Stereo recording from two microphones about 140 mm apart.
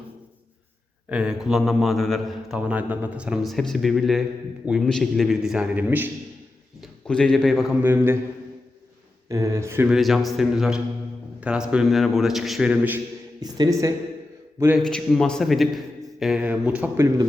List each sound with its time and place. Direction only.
1.1 s a man's voice: 5° right (ahead or behind)
6.8 s a man's voice: 5° left (ahead or behind)
7.8 s speech: 15° right (ahead or behind)
9.3 s speech: 20° right (ahead or behind)
9.9 s a man's voice: centre (ahead or behind)
13.4 s speech: 25° right (ahead or behind)
14.8 s a man's voice: 5° left (ahead or behind)